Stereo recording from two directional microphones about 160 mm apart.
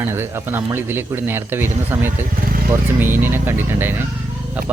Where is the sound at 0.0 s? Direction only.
15° right (ahead or behind).